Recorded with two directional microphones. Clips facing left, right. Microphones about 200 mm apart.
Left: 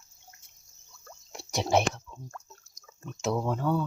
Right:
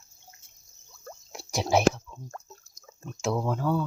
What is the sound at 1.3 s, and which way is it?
Whispering, centre (ahead or behind).